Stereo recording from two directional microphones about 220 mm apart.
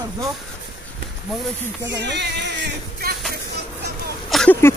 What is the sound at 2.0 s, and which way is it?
Speech, 50° right (ahead or behind).